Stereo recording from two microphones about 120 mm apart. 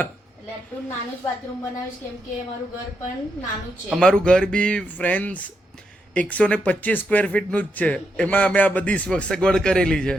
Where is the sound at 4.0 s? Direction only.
5° left (ahead or behind).